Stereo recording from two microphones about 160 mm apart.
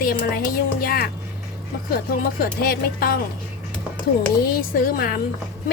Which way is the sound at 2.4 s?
70° left (ahead or behind).